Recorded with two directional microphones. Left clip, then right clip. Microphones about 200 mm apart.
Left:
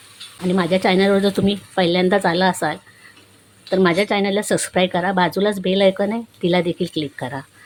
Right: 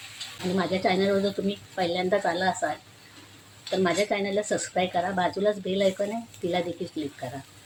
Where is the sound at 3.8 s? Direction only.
40° left (ahead or behind).